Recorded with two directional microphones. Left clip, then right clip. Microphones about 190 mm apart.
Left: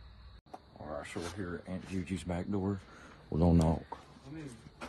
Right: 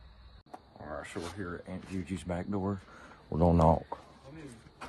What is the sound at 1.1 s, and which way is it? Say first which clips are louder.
Speech: right 1 dB; centre (ahead or behind).